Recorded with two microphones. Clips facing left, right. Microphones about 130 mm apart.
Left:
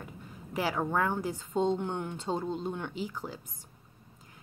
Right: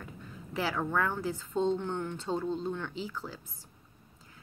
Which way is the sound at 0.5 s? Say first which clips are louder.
Left 1 dB; 15° left (ahead or behind).